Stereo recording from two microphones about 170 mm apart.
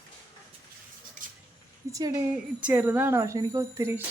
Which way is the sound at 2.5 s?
10° right (ahead or behind).